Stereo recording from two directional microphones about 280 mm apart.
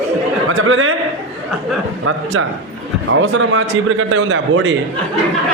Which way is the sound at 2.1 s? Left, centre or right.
Right.